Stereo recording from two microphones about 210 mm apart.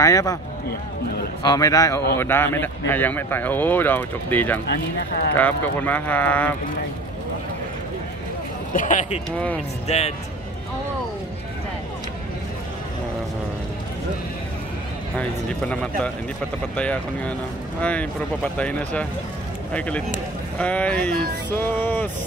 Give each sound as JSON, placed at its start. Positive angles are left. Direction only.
{"t": 0.0, "sound": "speech", "side_deg": 15}
{"t": 1.4, "sound": "speech", "side_deg": 20}
{"t": 8.7, "sound": "speech", "side_deg": 35}
{"t": 15.1, "sound": "a man's voice", "side_deg": 5}